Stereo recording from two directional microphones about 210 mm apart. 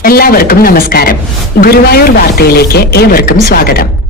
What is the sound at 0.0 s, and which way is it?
Speech, 45° left (ahead or behind).